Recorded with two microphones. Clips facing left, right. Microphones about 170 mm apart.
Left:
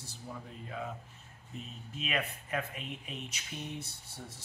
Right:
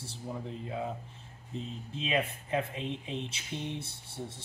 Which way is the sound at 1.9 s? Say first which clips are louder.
Right 4 dB; 25° right (ahead or behind).